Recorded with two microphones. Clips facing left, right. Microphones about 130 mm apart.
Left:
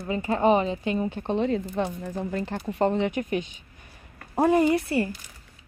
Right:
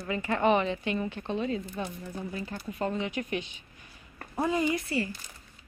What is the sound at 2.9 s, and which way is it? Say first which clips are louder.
Speech: left 7 dB; 60° left (ahead or behind).